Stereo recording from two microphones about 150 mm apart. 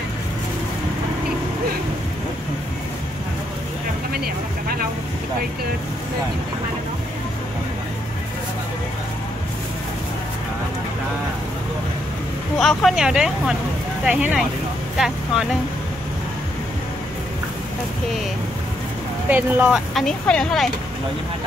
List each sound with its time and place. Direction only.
4.1 s vehicle: 90° right
12.5 s speech: centre (ahead or behind)
19.2 s speech: 10° right (ahead or behind)